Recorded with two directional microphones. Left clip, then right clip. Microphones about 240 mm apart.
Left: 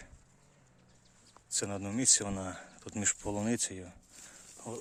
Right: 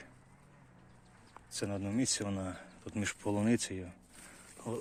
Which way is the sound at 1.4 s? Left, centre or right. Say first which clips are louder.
Left 2 dB; centre.